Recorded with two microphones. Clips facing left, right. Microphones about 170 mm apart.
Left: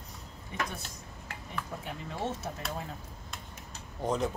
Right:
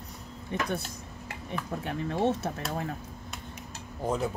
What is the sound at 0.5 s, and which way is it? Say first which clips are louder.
Speech: right 4 dB; 60° right (ahead or behind).